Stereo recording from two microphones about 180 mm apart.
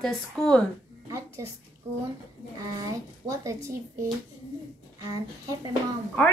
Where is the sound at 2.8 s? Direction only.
20° right (ahead or behind).